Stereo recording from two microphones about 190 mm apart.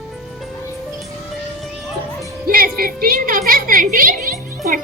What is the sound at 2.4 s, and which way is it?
Music, 50° right (ahead or behind).